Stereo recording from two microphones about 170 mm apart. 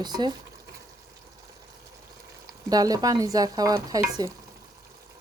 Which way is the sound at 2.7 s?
20° right (ahead or behind).